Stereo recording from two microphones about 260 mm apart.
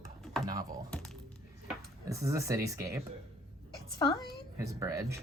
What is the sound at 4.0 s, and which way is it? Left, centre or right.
Speech, centre.